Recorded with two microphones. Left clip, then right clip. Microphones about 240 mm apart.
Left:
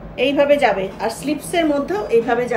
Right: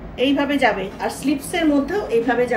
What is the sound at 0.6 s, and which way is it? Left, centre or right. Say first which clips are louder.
A woman's voice: left 2 dB; centre.